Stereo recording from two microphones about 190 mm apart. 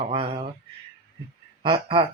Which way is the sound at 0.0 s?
30° right (ahead or behind).